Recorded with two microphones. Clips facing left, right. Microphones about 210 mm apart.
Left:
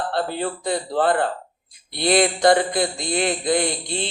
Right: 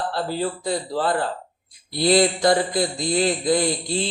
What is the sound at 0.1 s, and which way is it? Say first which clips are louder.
Speech: left 1 dB; 60° left (ahead or behind).